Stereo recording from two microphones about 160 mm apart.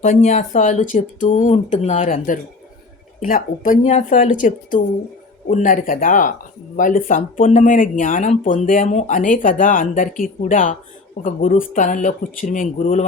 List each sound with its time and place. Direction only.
0.0 s speech: 50° left (ahead or behind)